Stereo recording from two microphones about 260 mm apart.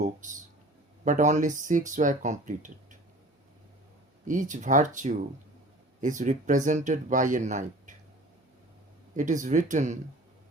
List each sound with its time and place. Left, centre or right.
0.0 s speech: right
4.3 s speech: right
9.1 s speech: right